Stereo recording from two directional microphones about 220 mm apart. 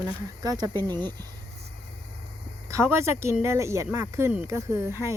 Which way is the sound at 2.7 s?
10° right (ahead or behind).